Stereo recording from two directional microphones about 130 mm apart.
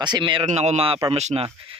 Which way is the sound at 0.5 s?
55° right (ahead or behind).